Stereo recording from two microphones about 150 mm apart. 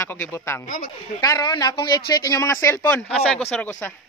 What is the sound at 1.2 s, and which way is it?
Speech, 25° left (ahead or behind).